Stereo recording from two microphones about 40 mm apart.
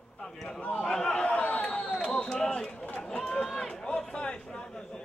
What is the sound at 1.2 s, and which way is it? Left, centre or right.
Chatter, left.